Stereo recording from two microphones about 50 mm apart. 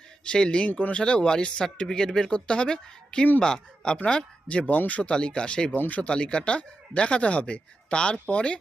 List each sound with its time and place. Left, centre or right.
0.3 s speech: centre
5.7 s speech: left
6.0 s speech: left